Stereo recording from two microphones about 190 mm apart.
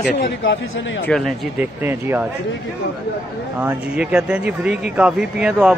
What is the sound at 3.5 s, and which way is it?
Speech, 5° right (ahead or behind).